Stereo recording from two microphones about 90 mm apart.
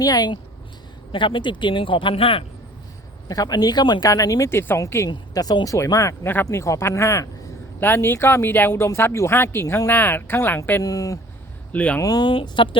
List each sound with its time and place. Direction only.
0.0 s speech: 50° left (ahead or behind)
1.1 s speech: 65° left (ahead or behind); by 2.4 s 90° left
3.2 s speech: 45° left (ahead or behind)
4.1 s speech: 40° left (ahead or behind)
5.0 s speech: 45° left (ahead or behind)
5.7 s speech: 35° left (ahead or behind)
10.8 s speech: 40° left (ahead or behind)
11.7 s speech: 15° left (ahead or behind)
11.9 s speech: 40° left (ahead or behind)
12.2 s speech: 70° left (ahead or behind)